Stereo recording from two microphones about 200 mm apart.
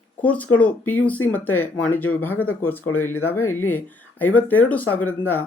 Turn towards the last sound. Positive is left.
turn(degrees=10)  # may be behind; listen again after turning